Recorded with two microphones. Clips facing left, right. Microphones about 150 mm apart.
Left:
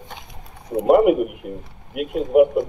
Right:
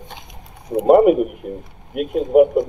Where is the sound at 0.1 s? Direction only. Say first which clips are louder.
Even; 15° right (ahead or behind).